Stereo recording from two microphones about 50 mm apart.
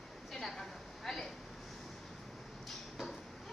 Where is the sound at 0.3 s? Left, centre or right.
Centre.